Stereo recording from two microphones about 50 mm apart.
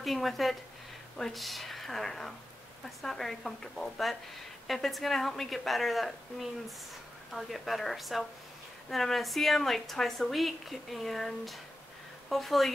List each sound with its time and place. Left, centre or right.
0.0 s a woman's voice: centre